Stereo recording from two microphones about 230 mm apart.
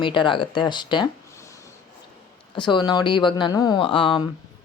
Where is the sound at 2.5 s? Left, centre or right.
Left.